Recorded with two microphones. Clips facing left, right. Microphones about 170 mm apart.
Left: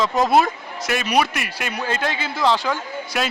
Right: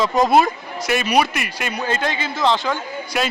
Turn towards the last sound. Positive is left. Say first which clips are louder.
# right 2 dB
turn(degrees=5)  # may be behind; listen again after turning